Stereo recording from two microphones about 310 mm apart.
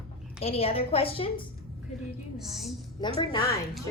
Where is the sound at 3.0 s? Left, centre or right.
Centre.